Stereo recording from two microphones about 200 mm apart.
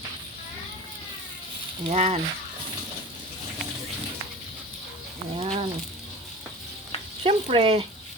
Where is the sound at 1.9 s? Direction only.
35° right (ahead or behind).